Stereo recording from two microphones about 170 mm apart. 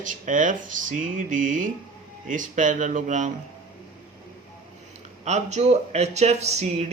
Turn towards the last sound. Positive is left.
turn(degrees=-40)  # may be behind; listen again after turning